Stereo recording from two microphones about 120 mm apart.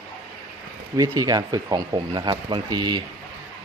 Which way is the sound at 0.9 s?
30° right (ahead or behind).